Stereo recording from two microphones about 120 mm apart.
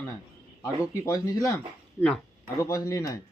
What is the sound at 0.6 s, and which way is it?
Cutlery, 25° left (ahead or behind).